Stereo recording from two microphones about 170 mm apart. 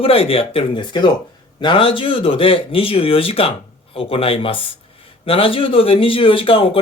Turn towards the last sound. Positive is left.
turn(degrees=30)  # may be behind; listen again after turning